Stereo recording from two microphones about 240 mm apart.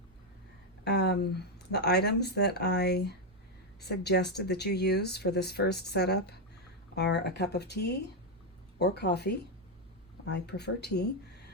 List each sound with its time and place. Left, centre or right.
0.9 s speech: left
8.8 s speech: left